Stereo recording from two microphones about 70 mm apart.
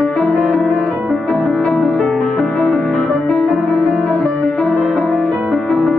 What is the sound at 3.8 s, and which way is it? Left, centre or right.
Music, centre.